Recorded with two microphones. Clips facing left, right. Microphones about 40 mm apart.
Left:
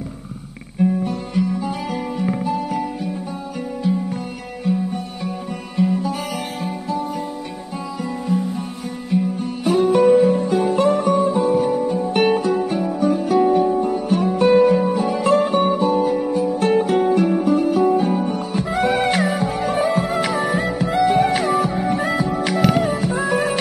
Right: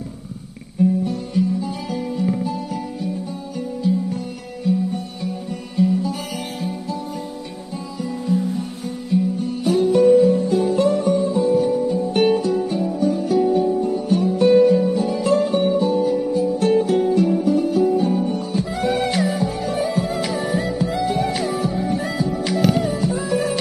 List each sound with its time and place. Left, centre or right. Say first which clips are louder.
0.7 s music: even; left
4.6 s music: right 1 dB; left
8.0 s music: right 1 dB; left